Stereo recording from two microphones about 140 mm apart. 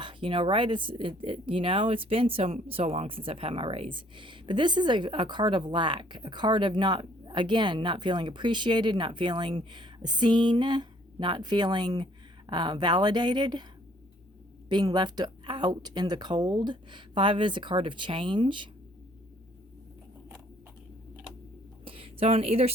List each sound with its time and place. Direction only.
0.0 s speech: 35° right (ahead or behind)
14.7 s speech: 30° right (ahead or behind)
21.8 s a sound: 40° right (ahead or behind)